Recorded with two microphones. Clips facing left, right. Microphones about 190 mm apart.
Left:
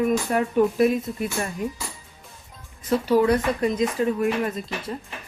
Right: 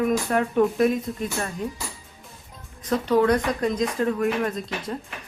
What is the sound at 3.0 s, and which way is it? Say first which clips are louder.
Speech: even; 5° left (ahead or behind).